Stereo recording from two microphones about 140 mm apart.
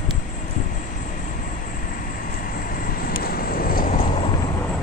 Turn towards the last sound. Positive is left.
turn(degrees=70)  # may be behind; listen again after turning